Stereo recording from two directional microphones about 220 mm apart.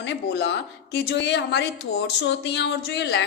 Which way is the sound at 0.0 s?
55° left (ahead or behind).